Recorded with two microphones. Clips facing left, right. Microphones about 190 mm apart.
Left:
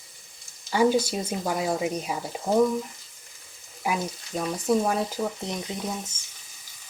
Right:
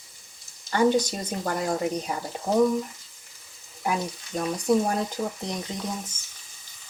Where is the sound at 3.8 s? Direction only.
5° left (ahead or behind).